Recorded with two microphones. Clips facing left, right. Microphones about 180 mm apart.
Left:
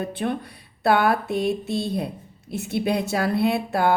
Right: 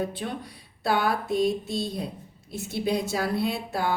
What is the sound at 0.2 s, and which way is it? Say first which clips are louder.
Speech: left 7 dB; 60° left (ahead or behind).